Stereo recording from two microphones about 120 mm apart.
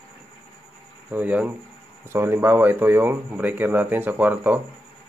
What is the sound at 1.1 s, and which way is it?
Speech, 15° right (ahead or behind).